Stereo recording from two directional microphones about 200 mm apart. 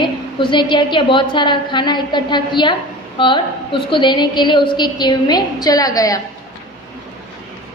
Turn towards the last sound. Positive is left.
turn(degrees=15)  # may be behind; listen again after turning